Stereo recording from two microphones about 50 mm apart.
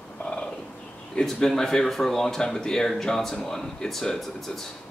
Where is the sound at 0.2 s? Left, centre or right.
Left.